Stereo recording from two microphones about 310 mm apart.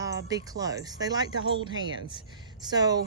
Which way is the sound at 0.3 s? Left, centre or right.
Centre.